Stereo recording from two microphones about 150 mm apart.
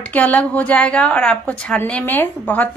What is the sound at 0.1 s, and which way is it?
A woman's voice, 10° left (ahead or behind).